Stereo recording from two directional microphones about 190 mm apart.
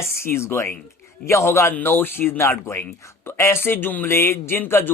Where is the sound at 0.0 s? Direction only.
15° left (ahead or behind).